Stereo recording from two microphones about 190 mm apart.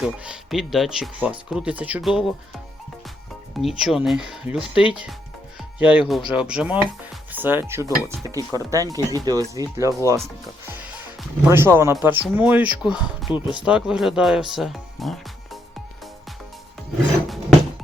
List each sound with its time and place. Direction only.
0.0 s speech: centre (ahead or behind)
3.6 s speech: centre (ahead or behind)
10.7 s music: 10° right (ahead or behind)
12.0 s speech: 10° right (ahead or behind)